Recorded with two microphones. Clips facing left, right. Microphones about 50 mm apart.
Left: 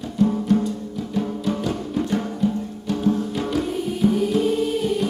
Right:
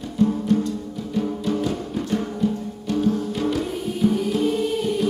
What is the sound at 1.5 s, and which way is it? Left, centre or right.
Music, centre.